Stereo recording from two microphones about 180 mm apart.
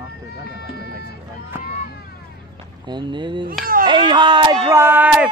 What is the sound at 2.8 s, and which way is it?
Speech, 25° right (ahead or behind).